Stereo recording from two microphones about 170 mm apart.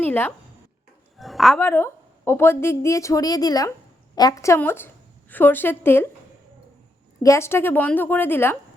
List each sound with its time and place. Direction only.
0.0 s speech: 10° left (ahead or behind)
1.2 s speech: centre (ahead or behind)
1.5 s a woman's voice: 15° left (ahead or behind)
7.2 s a woman's voice: 15° left (ahead or behind)